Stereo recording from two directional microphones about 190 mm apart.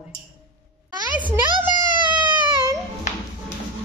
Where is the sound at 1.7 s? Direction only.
25° right (ahead or behind).